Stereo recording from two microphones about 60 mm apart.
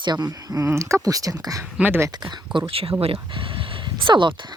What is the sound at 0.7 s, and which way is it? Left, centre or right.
Speech, right.